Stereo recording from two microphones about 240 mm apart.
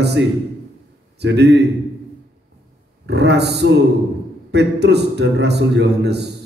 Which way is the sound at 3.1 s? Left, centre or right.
Right.